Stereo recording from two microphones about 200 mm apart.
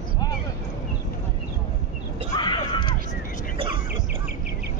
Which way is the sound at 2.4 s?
25° left (ahead or behind).